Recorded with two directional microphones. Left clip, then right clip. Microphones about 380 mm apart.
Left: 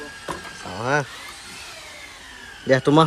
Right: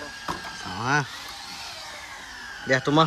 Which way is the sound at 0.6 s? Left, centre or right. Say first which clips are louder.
Left 2 dB; centre.